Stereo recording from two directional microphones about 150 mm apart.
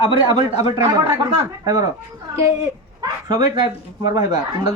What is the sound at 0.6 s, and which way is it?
A man's voice, 25° right (ahead or behind).